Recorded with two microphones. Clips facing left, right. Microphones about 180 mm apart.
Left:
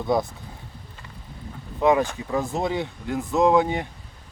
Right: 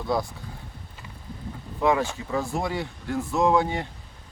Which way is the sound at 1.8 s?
15° left (ahead or behind).